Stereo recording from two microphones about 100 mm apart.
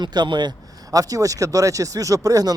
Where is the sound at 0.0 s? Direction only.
45° right (ahead or behind).